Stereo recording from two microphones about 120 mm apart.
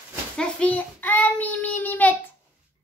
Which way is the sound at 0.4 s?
10° left (ahead or behind).